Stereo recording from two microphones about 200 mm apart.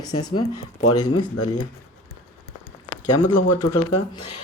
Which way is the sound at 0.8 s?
90° left.